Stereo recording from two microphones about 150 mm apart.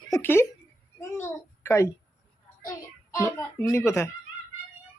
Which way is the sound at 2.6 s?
20° left (ahead or behind).